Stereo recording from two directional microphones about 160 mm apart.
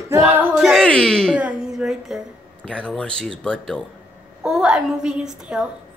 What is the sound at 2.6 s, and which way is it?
A man's voice, 5° left (ahead or behind).